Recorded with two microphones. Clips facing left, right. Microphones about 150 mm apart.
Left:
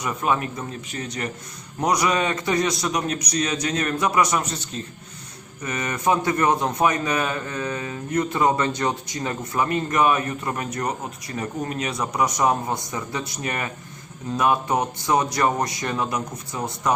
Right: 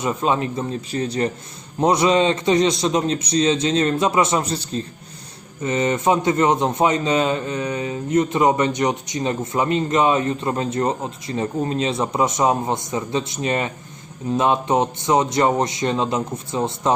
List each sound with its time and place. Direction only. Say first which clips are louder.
0.0 s a man's voice: right 3 dB; 25° right (ahead or behind)